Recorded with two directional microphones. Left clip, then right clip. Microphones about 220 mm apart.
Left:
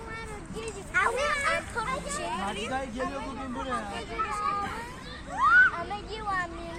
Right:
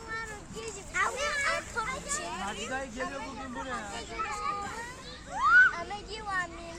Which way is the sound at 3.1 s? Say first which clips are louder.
Left 3 dB; 50° left (ahead or behind).